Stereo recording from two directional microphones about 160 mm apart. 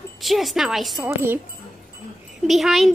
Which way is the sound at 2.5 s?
Centre (ahead or behind).